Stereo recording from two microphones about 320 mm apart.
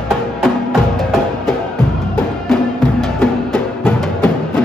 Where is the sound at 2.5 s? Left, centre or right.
Centre.